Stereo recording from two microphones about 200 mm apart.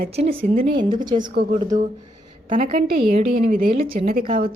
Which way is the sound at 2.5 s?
30° right (ahead or behind).